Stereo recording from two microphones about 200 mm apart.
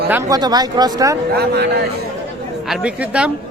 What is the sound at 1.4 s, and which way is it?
Speech, 55° right (ahead or behind).